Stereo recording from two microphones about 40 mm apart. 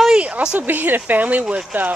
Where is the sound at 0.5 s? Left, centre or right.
Right.